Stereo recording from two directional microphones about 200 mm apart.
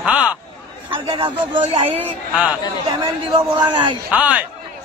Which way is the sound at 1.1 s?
25° right (ahead or behind).